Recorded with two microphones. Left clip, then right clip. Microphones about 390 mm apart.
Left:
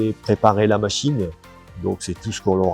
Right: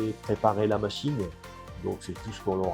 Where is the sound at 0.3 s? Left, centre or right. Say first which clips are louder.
Left 9 dB; left.